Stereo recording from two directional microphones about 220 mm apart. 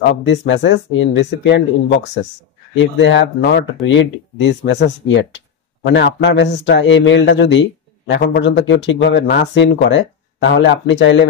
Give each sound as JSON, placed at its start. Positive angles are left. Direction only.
{"t": 0.1, "sound": "speech", "side_deg": 55}